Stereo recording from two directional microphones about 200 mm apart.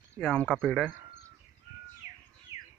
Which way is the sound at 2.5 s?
30° left (ahead or behind).